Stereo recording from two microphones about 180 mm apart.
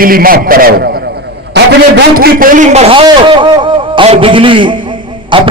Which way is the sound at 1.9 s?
60° right (ahead or behind).